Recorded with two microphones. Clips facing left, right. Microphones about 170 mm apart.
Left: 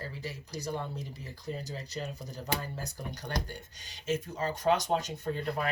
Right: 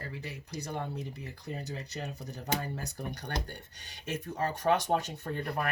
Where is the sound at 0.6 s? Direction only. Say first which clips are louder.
Even; 60° right (ahead or behind).